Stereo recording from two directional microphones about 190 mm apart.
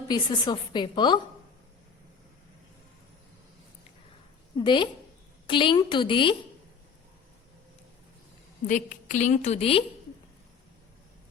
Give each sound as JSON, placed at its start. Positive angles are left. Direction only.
{"t": 0.1, "sound": "a woman's voice", "side_deg": 25}
{"t": 4.5, "sound": "a woman's voice", "side_deg": 25}
{"t": 8.6, "sound": "a woman's voice", "side_deg": 40}